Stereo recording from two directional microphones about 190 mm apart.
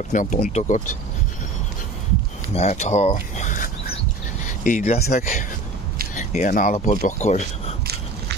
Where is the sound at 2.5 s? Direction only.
35° left (ahead or behind).